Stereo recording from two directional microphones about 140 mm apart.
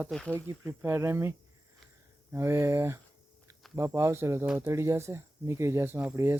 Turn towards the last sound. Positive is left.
turn(degrees=-15)  # may be behind; listen again after turning